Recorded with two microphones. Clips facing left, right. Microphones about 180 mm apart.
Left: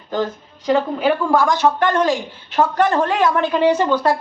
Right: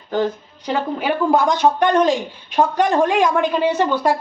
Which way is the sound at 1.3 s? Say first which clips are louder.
Even; 20° right (ahead or behind).